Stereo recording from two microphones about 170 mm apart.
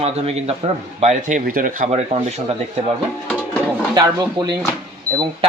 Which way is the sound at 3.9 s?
25° right (ahead or behind).